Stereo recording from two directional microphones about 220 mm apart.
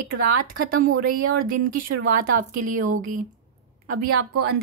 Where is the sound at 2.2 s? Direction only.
40° right (ahead or behind).